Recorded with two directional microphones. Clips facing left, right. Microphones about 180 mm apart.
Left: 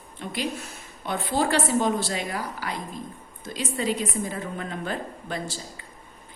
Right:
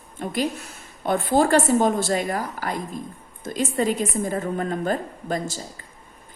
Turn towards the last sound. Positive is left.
turn(degrees=-45)  # may be behind; listen again after turning